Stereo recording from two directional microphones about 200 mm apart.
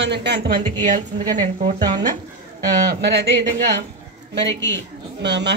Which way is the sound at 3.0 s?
55° right (ahead or behind).